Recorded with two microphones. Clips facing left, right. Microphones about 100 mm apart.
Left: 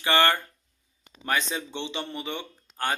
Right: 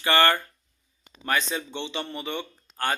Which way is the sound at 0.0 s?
15° left (ahead or behind).